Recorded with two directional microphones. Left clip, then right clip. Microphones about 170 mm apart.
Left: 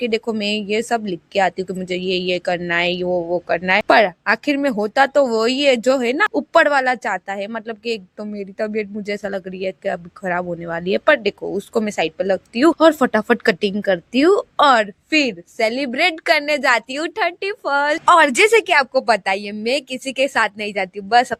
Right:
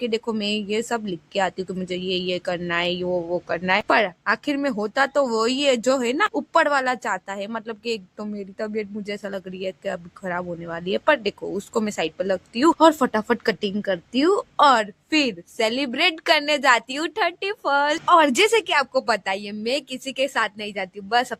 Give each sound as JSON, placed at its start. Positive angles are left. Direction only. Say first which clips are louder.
{"t": 0.0, "sound": "a woman's voice", "louder": "left 4 dB", "side_deg": 20}
{"t": 18.0, "sound": "speech", "louder": "left 5 dB", "side_deg": 40}